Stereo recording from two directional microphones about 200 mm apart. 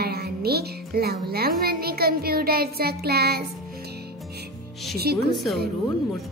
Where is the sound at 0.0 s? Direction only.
50° right (ahead or behind).